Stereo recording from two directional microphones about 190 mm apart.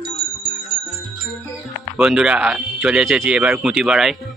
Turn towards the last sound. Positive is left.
turn(degrees=0)  # may be behind; listen again after turning